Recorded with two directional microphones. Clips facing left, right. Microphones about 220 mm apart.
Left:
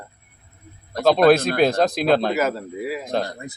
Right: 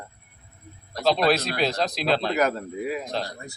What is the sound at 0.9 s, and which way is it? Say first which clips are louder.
Speech: left 7 dB; 50° left (ahead or behind).